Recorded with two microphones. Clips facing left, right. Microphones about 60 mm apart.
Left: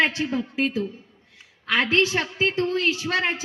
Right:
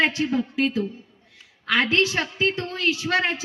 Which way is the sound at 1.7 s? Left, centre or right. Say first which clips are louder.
Even; left.